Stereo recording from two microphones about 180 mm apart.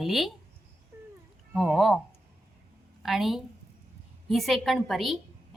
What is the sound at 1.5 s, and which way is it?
Speech, centre (ahead or behind).